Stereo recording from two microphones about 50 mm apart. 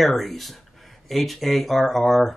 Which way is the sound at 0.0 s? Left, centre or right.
Centre.